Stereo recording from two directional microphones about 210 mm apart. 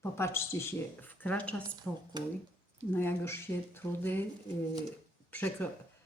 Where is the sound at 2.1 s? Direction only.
20° right (ahead or behind).